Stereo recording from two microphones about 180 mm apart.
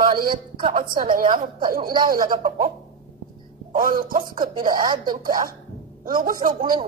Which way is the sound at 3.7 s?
50° right (ahead or behind).